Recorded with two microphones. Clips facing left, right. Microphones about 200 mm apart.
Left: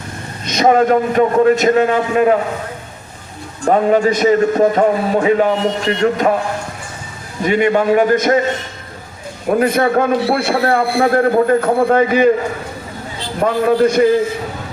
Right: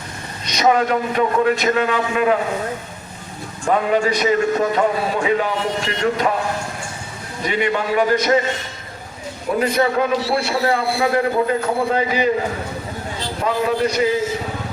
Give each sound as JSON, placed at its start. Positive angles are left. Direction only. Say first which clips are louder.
{"t": 0.4, "sound": "a man's voice", "louder": "left 5 dB", "side_deg": 50}
{"t": 3.7, "sound": "a man's voice", "louder": "left 5 dB", "side_deg": 40}
{"t": 7.4, "sound": "a man's voice", "louder": "left 7 dB", "side_deg": 50}
{"t": 9.6, "sound": "a man's voice", "louder": "left 3 dB", "side_deg": 50}
{"t": 13.4, "sound": "a man's voice", "louder": "left 6 dB", "side_deg": 50}